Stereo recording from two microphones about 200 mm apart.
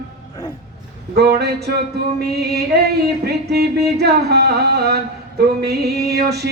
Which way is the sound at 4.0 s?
55° right (ahead or behind).